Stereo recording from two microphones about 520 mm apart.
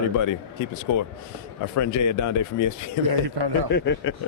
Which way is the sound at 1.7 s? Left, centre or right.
Left.